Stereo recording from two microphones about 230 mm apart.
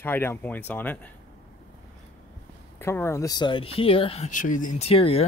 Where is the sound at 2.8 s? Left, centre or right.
Centre.